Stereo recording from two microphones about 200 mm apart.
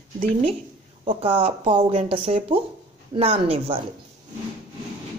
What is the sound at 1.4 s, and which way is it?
Speech, 25° right (ahead or behind).